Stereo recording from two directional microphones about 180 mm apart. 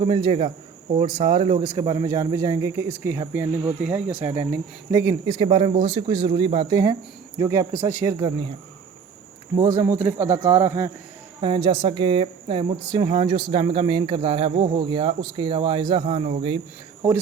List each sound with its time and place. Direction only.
0.0 s speech: 25° right (ahead or behind)
1.6 s speech: 20° right (ahead or behind)
9.6 s speech: 15° right (ahead or behind); by 16.6 s 30° right (ahead or behind)